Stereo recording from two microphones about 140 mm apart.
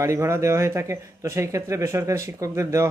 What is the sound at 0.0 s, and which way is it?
Speech, 20° right (ahead or behind).